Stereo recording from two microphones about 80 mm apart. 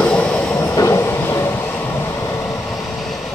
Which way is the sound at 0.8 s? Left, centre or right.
Left.